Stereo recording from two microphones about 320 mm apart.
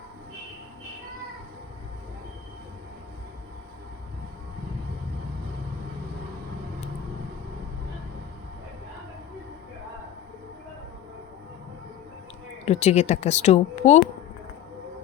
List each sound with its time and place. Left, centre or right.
12.6 s speech: left